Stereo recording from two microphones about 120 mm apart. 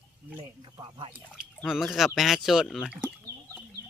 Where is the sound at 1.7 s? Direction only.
5° right (ahead or behind).